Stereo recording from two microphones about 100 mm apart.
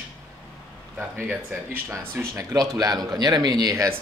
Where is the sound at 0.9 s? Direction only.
20° right (ahead or behind).